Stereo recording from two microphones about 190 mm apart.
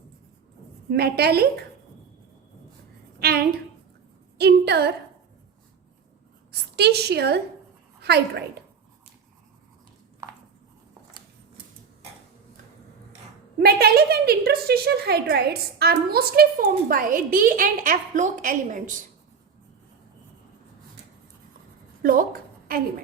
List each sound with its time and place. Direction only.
0.9 s a woman's voice: 55° right (ahead or behind)
3.2 s a woman's voice: 55° right (ahead or behind)
6.5 s a woman's voice: 60° right (ahead or behind)
13.6 s a woman's voice: 55° right (ahead or behind)
22.0 s a sound: 50° right (ahead or behind)